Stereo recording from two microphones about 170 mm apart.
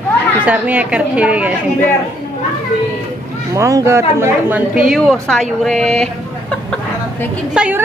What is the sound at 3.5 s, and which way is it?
Speech, 20° right (ahead or behind).